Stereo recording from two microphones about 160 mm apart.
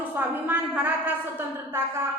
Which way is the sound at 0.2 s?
10° right (ahead or behind).